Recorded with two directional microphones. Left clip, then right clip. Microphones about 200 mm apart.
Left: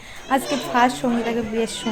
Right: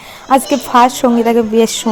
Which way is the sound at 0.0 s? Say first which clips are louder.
Right 10 dB; 35° right (ahead or behind).